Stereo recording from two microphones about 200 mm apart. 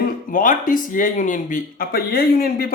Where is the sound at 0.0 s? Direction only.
45° left (ahead or behind).